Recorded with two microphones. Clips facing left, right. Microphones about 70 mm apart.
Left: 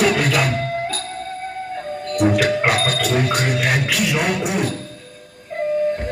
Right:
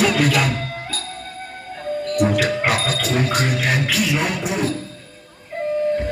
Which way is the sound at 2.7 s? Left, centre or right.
Left.